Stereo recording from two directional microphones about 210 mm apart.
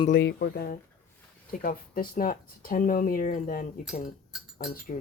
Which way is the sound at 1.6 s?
40° left (ahead or behind).